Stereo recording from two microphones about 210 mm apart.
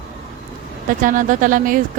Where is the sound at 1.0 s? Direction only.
40° right (ahead or behind).